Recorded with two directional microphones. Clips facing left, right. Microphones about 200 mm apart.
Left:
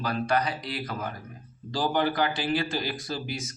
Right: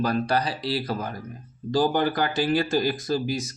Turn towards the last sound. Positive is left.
turn(degrees=-40)  # may be behind; listen again after turning